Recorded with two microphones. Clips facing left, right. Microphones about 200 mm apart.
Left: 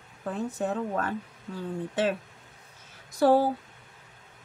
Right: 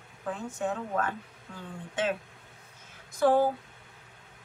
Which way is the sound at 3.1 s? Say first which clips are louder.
Left 3 dB; 35° left (ahead or behind).